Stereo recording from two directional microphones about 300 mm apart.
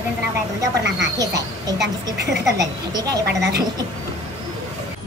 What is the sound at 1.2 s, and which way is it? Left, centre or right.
Speech, centre.